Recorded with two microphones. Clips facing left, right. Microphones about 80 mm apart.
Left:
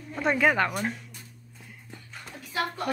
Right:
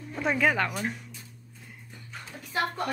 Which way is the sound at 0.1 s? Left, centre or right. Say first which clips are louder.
Left 2 dB; centre.